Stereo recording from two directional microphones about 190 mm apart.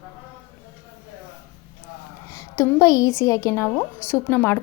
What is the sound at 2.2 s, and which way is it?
A woman's voice, 15° left (ahead or behind).